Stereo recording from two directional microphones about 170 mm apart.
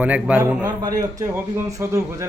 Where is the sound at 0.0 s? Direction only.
10° right (ahead or behind).